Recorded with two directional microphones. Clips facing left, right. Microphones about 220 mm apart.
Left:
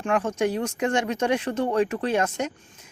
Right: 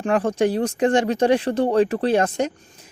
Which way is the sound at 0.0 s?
35° right (ahead or behind).